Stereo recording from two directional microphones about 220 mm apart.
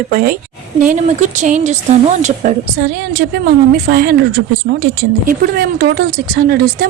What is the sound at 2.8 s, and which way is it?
A woman's voice, 45° right (ahead or behind).